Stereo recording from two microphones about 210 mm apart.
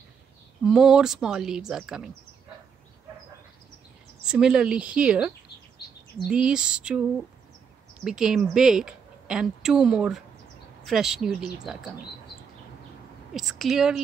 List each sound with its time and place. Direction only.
0.7 s a woman's voice: centre (ahead or behind)
4.2 s a woman's voice: 5° right (ahead or behind)
5.8 s bird: 50° left (ahead or behind)
6.1 s a woman's voice: 5° right (ahead or behind)
13.3 s a woman's voice: centre (ahead or behind)